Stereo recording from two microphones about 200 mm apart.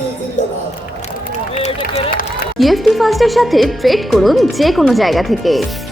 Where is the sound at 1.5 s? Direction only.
35° left (ahead or behind).